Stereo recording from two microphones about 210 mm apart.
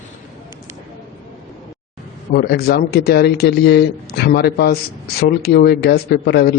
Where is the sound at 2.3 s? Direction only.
50° left (ahead or behind).